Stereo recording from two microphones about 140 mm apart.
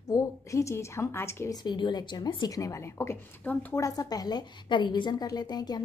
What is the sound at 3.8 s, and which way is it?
A woman's voice, 25° left (ahead or behind).